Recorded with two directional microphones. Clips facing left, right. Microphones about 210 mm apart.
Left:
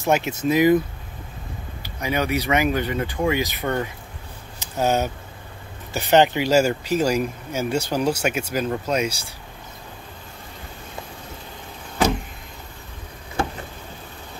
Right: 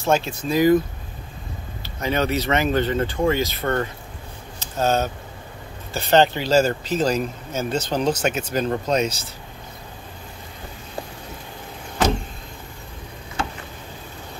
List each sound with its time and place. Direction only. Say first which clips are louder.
0.0 s speech: left 1 dB; 20° left (ahead or behind)
1.8 s speech: right 2 dB; 10° left (ahead or behind)